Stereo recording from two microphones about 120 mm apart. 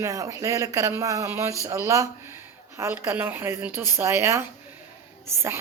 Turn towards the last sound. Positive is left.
turn(degrees=-20)  # may be behind; listen again after turning